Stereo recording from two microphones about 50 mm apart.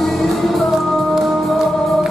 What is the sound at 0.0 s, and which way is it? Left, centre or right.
Music, centre.